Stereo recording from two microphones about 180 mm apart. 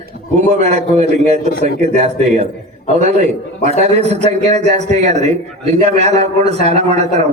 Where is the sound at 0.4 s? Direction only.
35° right (ahead or behind).